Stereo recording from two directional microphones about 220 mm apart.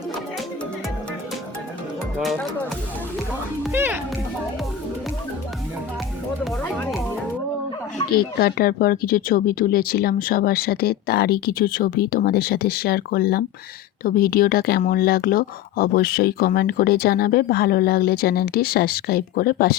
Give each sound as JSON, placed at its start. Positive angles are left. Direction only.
{"t": 2.2, "sound": "speech", "side_deg": 0}
{"t": 3.7, "sound": "speech", "side_deg": -10}
{"t": 8.1, "sound": "speech", "side_deg": 45}